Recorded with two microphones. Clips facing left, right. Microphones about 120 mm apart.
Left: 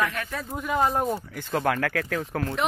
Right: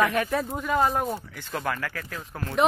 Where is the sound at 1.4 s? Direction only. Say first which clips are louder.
Left 9 dB; 55° left (ahead or behind); by 2.4 s 75° left (ahead or behind).